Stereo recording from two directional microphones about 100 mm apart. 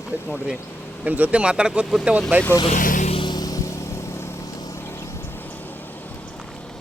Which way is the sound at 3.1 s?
50° left (ahead or behind).